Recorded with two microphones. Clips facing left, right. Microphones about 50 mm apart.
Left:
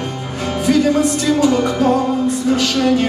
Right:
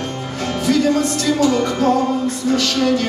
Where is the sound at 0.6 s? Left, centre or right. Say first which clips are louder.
Left 2 dB; centre.